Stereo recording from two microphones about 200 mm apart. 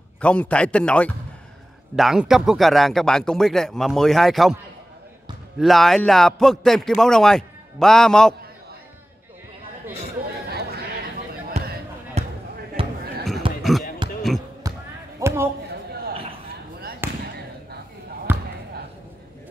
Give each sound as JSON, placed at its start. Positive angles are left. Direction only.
{"t": 0.2, "sound": "a man's voice", "side_deg": 5}
{"t": 5.6, "sound": "a man's voice", "side_deg": 0}
{"t": 11.6, "sound": "basketball bounce", "side_deg": -35}
{"t": 12.8, "sound": "a sound", "side_deg": -25}
{"t": 13.6, "sound": "basketball bounce", "side_deg": 0}
{"t": 14.7, "sound": "basketball bounce", "side_deg": -20}
{"t": 15.1, "sound": "a sound", "side_deg": -15}
{"t": 17.0, "sound": "basketball bounce", "side_deg": -10}
{"t": 18.3, "sound": "basketball bounce", "side_deg": -10}